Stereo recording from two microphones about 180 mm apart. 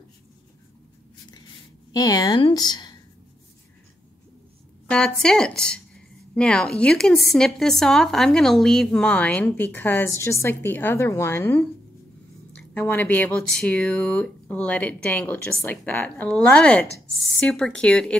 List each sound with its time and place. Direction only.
1.9 s a woman's voice: 20° left (ahead or behind)
4.8 s speech: 5° left (ahead or behind)